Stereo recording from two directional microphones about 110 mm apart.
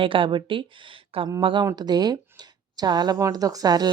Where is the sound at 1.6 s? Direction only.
40° right (ahead or behind).